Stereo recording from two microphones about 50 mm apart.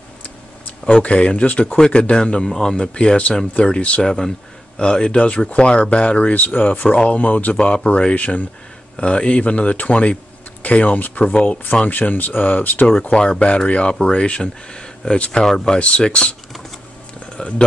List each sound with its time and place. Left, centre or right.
0.8 s speech: left
11.3 s speech: left
11.9 s speech: left
13.0 s speech: centre
15.8 s speech: left
17.4 s speech: left